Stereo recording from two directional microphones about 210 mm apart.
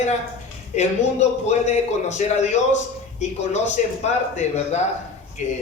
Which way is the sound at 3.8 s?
35° left (ahead or behind).